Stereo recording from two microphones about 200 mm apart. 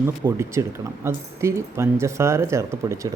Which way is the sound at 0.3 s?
15° right (ahead or behind).